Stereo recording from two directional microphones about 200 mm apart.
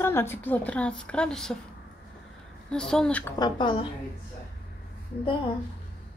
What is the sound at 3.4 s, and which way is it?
Speech, 25° left (ahead or behind).